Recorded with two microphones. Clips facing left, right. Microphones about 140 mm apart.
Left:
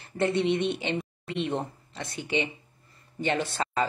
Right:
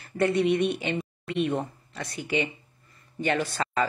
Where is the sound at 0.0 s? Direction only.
25° left (ahead or behind).